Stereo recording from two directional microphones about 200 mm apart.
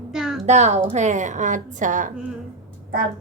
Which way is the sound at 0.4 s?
35° right (ahead or behind).